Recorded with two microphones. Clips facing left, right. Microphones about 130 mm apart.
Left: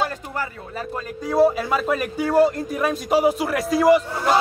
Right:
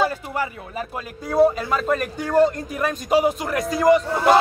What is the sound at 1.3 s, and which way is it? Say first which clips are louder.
A man's voice: even; 5° left (ahead or behind).